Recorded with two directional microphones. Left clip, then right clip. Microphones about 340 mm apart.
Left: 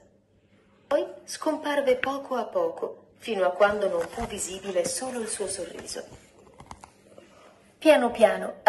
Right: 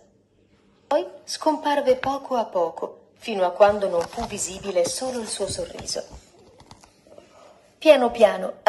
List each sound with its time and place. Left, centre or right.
0.9 s speech: right
7.8 s a woman's voice: centre